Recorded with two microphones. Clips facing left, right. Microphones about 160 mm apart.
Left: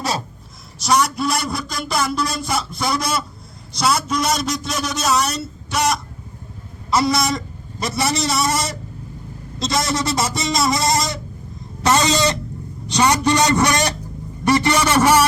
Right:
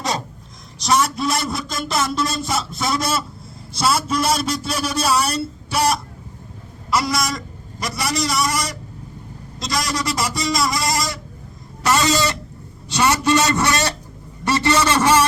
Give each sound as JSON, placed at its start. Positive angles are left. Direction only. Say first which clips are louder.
{"t": 0.8, "sound": "a man's voice", "louder": "left 1 dB", "side_deg": 0}
{"t": 6.9, "sound": "a man's voice", "louder": "left 3 dB", "side_deg": 25}